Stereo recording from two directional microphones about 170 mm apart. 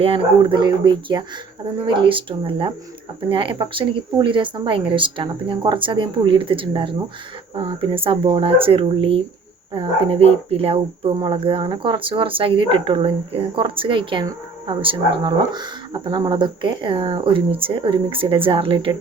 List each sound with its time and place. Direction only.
0.0 s speech: 30° right (ahead or behind)